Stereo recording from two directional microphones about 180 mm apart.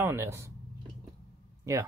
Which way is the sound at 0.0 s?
15° right (ahead or behind).